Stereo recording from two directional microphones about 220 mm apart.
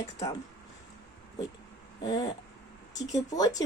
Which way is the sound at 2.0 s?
15° left (ahead or behind).